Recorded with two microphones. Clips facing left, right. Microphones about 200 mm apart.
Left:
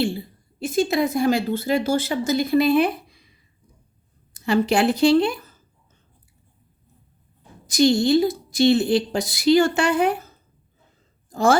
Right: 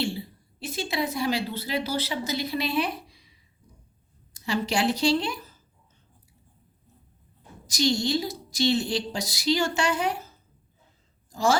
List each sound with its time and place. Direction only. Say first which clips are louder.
0.0 s a woman's voice: left 6 dB; 50° left (ahead or behind)
4.4 s a woman's voice: left 7 dB; 55° left (ahead or behind)
7.7 s a woman's voice: left 8 dB; 55° left (ahead or behind)
11.3 s speech: left 5 dB; 55° left (ahead or behind)